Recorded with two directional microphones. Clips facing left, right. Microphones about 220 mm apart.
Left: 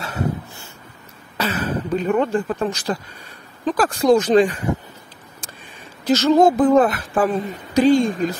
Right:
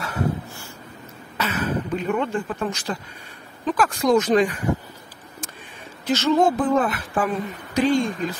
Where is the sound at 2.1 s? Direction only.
40° left (ahead or behind).